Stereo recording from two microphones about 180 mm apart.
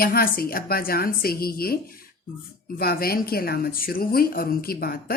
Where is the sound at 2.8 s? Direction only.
55° left (ahead or behind).